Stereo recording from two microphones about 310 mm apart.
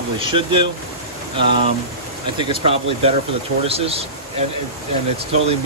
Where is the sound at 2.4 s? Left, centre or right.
Centre.